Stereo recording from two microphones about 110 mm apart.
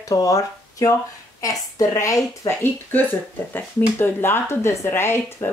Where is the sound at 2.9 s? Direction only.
15° left (ahead or behind).